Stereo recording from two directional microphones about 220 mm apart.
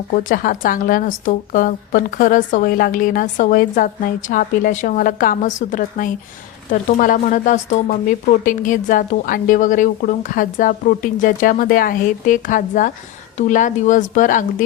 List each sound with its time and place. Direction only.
0.1 s speech: 40° left (ahead or behind)